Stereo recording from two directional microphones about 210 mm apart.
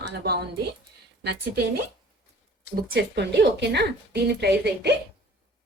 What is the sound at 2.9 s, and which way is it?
Speech, 55° right (ahead or behind).